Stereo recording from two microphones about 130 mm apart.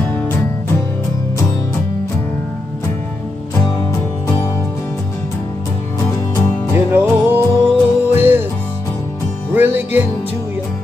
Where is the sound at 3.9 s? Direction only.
25° left (ahead or behind).